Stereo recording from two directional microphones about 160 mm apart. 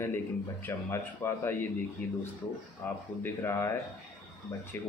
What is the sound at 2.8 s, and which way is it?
Speech, 10° left (ahead or behind).